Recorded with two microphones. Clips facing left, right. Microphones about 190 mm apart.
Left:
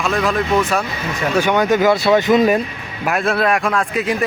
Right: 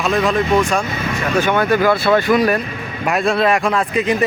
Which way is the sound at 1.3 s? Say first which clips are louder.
Left 1 dB; 15° left (ahead or behind).